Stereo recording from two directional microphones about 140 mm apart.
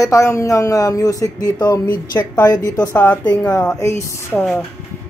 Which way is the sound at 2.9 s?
15° left (ahead or behind).